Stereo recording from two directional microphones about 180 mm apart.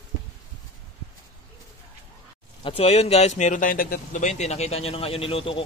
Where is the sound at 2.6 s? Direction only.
30° left (ahead or behind).